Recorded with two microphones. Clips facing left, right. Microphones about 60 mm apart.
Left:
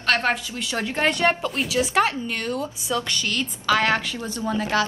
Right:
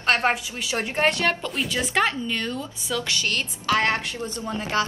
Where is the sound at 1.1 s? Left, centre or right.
Left.